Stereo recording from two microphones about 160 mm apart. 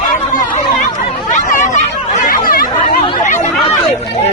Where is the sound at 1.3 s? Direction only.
55° left (ahead or behind).